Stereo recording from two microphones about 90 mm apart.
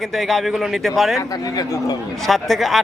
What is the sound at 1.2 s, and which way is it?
Speech, 45° left (ahead or behind).